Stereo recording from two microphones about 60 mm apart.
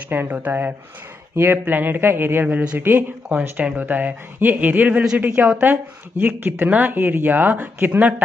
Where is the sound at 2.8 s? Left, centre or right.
Right.